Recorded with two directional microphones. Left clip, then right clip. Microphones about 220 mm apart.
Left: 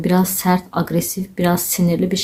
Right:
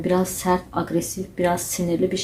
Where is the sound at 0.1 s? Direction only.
35° left (ahead or behind).